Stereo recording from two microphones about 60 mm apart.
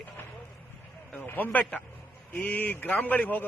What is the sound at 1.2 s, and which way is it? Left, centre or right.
A man's voice, left.